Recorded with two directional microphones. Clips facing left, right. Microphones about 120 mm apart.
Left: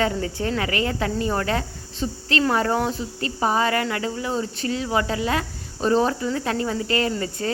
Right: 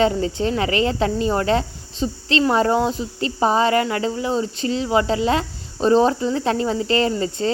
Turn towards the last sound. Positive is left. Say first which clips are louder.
# right 4 dB
turn(degrees=-25)  # may be behind; listen again after turning